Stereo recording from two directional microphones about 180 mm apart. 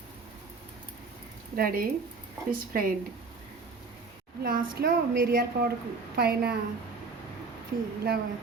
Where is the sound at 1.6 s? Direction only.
55° right (ahead or behind).